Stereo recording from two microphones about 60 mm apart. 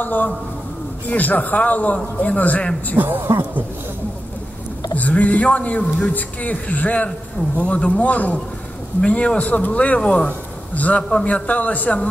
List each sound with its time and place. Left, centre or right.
0.0 s a man's voice: left
3.0 s a man's voice: right
4.9 s a man's voice: left
11.0 s a man's voice: centre
11.2 s a man's voice: left